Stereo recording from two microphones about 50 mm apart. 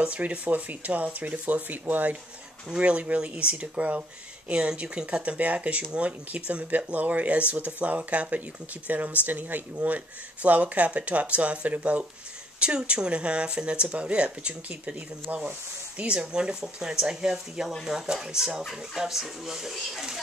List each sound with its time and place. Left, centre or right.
0.0 s speech: right
16.0 s speech: right; by 20.1 s centre